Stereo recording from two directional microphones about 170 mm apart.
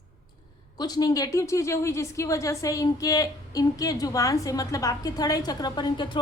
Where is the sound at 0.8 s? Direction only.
25° left (ahead or behind).